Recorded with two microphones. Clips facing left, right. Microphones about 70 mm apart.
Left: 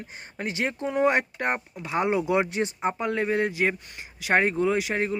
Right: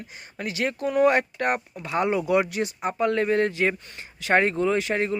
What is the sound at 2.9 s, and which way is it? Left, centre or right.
Speech, centre.